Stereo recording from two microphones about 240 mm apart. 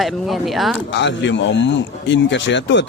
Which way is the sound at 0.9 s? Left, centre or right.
Left.